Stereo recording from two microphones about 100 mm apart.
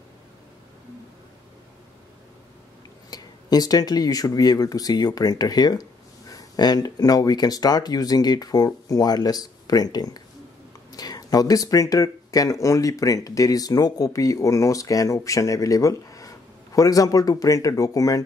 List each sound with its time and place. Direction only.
3.1 s speech: 40° left (ahead or behind)